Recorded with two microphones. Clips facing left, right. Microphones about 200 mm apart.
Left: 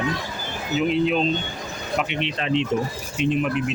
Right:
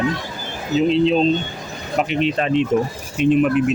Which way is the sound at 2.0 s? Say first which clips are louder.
Right 7 dB; 40° right (ahead or behind).